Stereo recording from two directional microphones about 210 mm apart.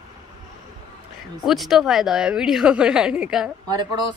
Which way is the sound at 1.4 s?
Centre (ahead or behind).